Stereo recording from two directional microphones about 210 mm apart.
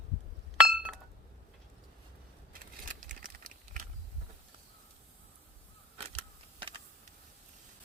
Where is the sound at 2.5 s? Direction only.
40° right (ahead or behind).